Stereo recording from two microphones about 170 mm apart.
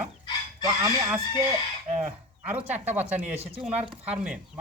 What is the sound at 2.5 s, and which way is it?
Speech, 10° right (ahead or behind).